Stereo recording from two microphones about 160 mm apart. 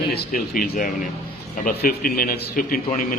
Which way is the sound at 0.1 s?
60° left (ahead or behind).